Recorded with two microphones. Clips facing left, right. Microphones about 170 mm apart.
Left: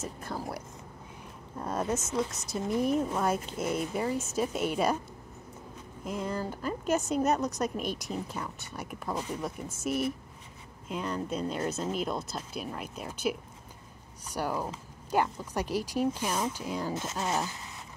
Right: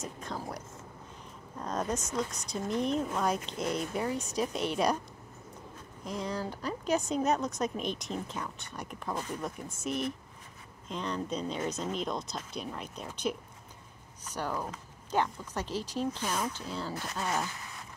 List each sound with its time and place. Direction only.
0.0 s a woman's voice: 5° left (ahead or behind)
6.0 s a woman's voice: 5° left (ahead or behind)